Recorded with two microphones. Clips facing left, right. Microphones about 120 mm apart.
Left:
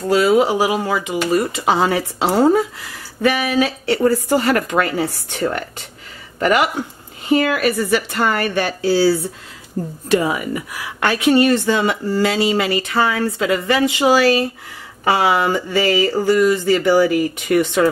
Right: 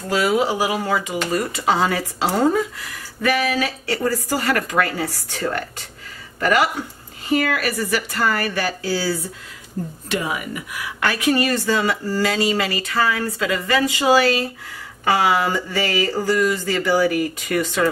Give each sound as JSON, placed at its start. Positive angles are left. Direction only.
{"t": 0.1, "sound": "a woman's voice", "side_deg": 30}
{"t": 10.0, "sound": "a woman's voice", "side_deg": 35}